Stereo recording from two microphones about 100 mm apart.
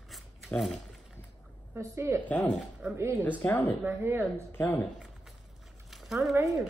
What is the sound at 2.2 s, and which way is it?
Speech, 15° left (ahead or behind).